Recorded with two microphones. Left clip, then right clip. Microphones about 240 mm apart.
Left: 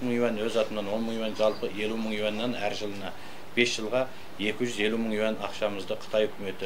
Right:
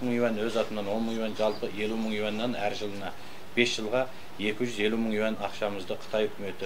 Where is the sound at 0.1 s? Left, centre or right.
Right.